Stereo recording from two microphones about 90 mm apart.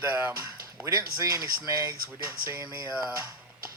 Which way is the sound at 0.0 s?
25° right (ahead or behind).